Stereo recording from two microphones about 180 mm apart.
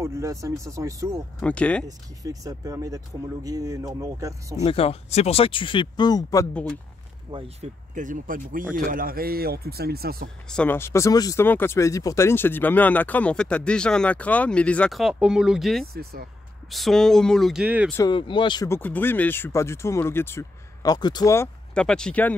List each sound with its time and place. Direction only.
0.0 s speech: 15° right (ahead or behind)
1.4 s speech: 5° left (ahead or behind)
1.9 s speech: 20° right (ahead or behind)
4.6 s speech: 35° left (ahead or behind)
7.2 s speech: 30° right (ahead or behind); by 10.3 s 60° right (ahead or behind)
10.5 s speech: 10° left (ahead or behind)
15.9 s speech: 60° right (ahead or behind)
16.7 s speech: centre (ahead or behind)
18.0 s speech: 25° left (ahead or behind)
18.7 s speech: 10° left (ahead or behind)
21.7 s speech: 5° left (ahead or behind)